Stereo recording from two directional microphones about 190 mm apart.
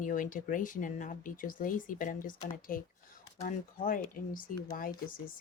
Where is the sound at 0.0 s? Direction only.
45° left (ahead or behind).